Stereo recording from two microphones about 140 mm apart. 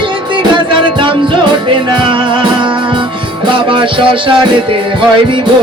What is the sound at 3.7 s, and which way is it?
Music, 35° right (ahead or behind).